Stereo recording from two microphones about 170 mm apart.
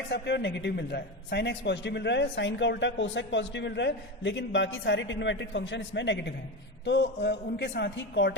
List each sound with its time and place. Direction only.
0.1 s a man's voice: 85° left